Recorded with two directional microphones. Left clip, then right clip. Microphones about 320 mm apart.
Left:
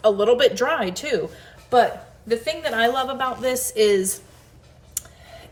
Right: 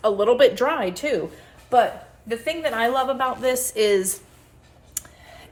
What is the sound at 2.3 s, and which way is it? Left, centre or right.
Speech, centre.